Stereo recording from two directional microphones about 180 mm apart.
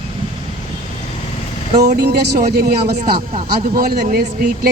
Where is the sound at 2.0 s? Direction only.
65° right (ahead or behind).